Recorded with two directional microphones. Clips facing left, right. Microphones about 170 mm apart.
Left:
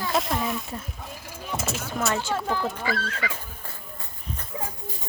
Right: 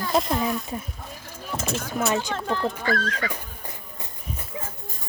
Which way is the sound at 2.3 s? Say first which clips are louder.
Right 1 dB; 10° left (ahead or behind).